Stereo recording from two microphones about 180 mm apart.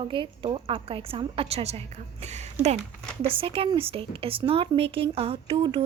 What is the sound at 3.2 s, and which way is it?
Speech, 30° right (ahead or behind).